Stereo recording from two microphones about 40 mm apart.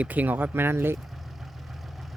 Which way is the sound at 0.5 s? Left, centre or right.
Right.